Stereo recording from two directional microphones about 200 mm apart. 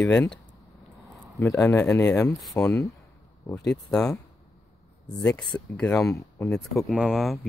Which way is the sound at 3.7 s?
5° left (ahead or behind).